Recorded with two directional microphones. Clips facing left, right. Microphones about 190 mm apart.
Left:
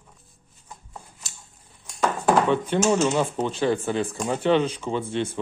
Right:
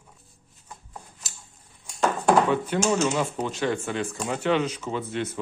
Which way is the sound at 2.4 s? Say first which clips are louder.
Left 2 dB; 25° left (ahead or behind).